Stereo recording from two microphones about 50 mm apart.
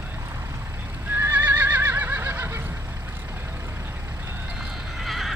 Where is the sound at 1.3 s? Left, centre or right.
Right.